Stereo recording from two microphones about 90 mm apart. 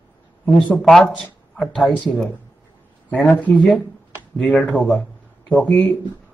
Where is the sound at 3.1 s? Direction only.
15° left (ahead or behind).